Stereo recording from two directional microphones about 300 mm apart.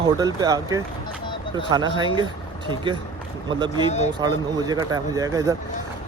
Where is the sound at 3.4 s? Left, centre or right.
Centre.